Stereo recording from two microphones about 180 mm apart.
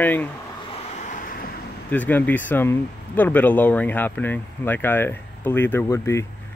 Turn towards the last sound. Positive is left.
turn(degrees=15)  # may be behind; listen again after turning